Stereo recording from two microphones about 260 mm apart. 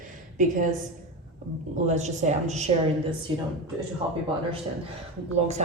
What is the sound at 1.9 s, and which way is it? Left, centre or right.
Speech, right.